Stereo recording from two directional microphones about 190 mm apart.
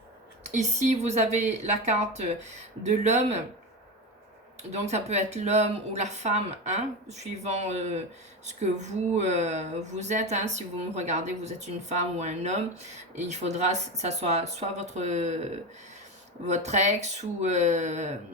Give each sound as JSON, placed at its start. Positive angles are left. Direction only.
{"t": 0.4, "sound": "speech", "side_deg": -40}
{"t": 4.7, "sound": "speech", "side_deg": -35}
{"t": 16.5, "sound": "speech", "side_deg": -35}